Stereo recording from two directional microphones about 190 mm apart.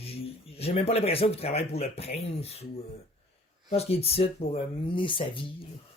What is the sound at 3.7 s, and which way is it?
Speech, 30° left (ahead or behind).